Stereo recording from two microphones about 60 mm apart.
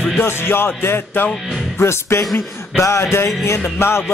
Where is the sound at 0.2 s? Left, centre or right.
Left.